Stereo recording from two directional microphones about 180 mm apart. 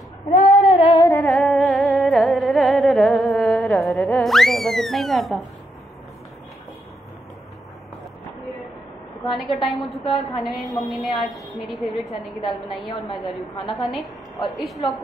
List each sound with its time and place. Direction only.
0.7 s singing: 30° left (ahead or behind)
1.2 s humming: centre (ahead or behind)
9.5 s a woman's voice: centre (ahead or behind)
12.4 s a woman's voice: 25° left (ahead or behind)
13.7 s a woman's voice: centre (ahead or behind)